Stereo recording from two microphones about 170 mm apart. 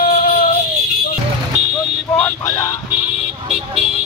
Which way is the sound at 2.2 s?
20° left (ahead or behind).